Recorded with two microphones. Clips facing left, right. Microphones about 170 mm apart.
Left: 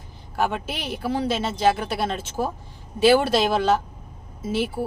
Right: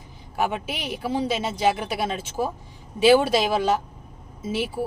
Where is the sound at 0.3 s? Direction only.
15° right (ahead or behind).